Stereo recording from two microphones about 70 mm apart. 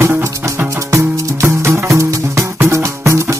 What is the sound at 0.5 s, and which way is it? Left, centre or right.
Music, right.